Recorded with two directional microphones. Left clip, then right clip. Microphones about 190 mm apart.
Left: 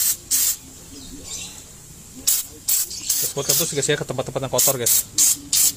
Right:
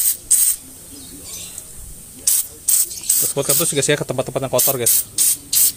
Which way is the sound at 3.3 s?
30° right (ahead or behind).